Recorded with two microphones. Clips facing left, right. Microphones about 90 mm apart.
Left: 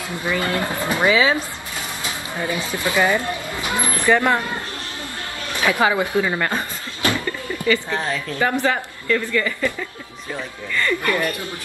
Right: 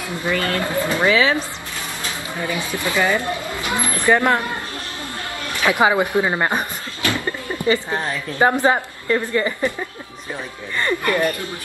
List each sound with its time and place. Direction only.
0.3 s speech: 20° left (ahead or behind)
2.4 s speech: 25° left (ahead or behind)
4.0 s speech: 15° right (ahead or behind)
5.7 s a woman's voice: 20° right (ahead or behind)